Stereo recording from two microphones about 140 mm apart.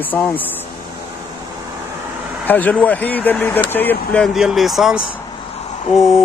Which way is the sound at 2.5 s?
10° left (ahead or behind).